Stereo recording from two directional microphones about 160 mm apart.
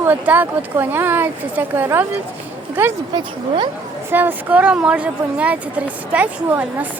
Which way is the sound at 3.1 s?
30° right (ahead or behind).